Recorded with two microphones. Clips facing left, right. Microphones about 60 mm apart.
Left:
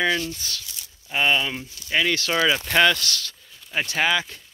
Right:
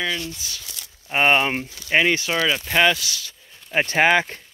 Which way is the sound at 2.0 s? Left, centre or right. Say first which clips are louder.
Right 4 dB; right.